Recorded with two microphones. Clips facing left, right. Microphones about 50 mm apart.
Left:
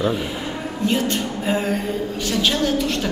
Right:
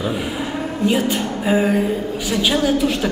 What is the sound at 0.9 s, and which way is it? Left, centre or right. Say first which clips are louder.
A woman's voice: right 2 dB; centre.